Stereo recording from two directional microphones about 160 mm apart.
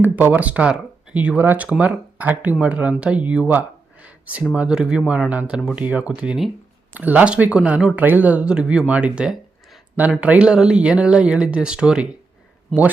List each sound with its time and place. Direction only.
0.0 s speech: 10° right (ahead or behind)
4.0 s a sound: 10° right (ahead or behind)
4.5 s speech: 5° right (ahead or behind)